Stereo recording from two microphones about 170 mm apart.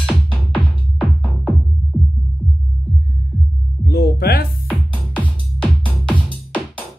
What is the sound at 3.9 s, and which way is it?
Music, 65° left (ahead or behind).